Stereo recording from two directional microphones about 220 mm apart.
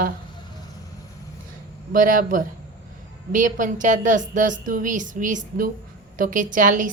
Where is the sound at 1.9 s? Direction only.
40° right (ahead or behind).